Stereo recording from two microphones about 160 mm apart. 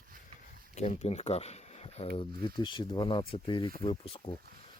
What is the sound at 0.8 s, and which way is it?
Speech, 45° left (ahead or behind).